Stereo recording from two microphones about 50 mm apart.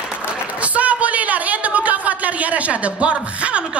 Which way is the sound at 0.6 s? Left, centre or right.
Right.